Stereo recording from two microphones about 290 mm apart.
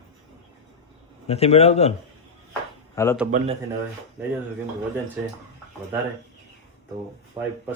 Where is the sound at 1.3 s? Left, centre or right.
Left.